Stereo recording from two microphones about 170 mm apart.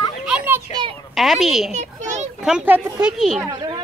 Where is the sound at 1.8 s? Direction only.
45° right (ahead or behind).